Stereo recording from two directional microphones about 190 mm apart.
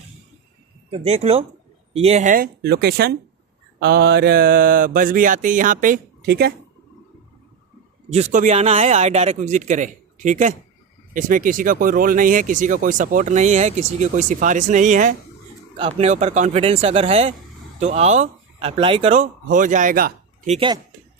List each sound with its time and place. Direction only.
0.8 s a man's voice: 30° right (ahead or behind); by 6.5 s 55° right (ahead or behind)
8.1 s a man's voice: 40° right (ahead or behind)
15.7 s speech: 30° right (ahead or behind); by 20.5 s 45° right (ahead or behind)
20.5 s speech: 25° right (ahead or behind)